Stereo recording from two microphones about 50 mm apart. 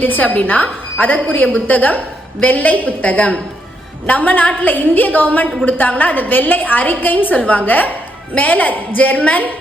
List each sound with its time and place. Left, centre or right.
0.0 s a woman's voice: left